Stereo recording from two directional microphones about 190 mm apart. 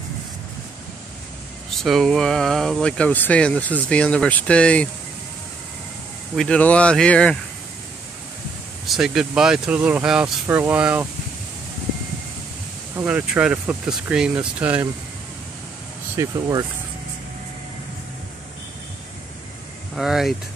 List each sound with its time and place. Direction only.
1.7 s speech: centre (ahead or behind)
6.3 s speech: 5° left (ahead or behind)
8.8 s speech: centre (ahead or behind)
12.9 s speech: 5° right (ahead or behind)
16.2 s speech: 20° right (ahead or behind)
20.0 s speech: centre (ahead or behind)